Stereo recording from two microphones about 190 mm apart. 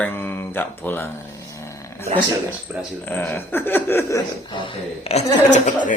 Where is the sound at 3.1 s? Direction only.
10° left (ahead or behind).